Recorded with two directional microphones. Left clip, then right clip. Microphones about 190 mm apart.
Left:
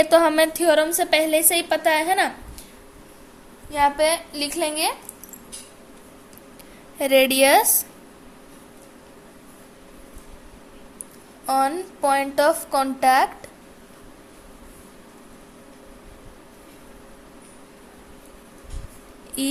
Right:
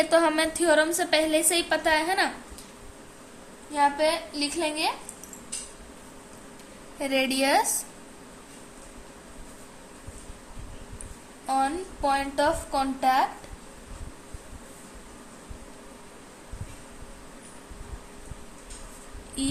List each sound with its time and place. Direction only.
0.0 s a woman's voice: 30° left (ahead or behind)
3.7 s a woman's voice: 45° left (ahead or behind)
7.0 s a woman's voice: 40° left (ahead or behind)
11.4 s a woman's voice: 40° left (ahead or behind)